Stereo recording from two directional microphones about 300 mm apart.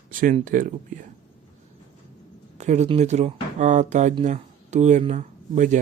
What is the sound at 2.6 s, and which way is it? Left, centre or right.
Speech, right.